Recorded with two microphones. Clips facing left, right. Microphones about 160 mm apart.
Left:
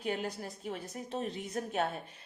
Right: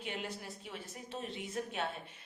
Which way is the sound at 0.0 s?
40° left (ahead or behind).